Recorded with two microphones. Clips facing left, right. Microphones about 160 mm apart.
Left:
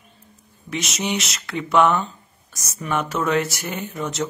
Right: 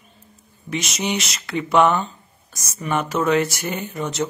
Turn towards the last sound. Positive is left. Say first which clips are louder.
# right 1 dB
turn(degrees=0)  # may be behind; listen again after turning